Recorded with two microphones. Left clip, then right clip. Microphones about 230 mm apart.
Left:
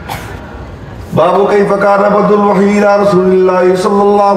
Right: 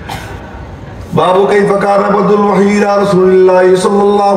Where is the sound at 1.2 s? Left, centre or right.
Right.